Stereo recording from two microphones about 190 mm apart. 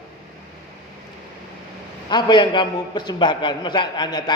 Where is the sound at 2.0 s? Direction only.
25° left (ahead or behind).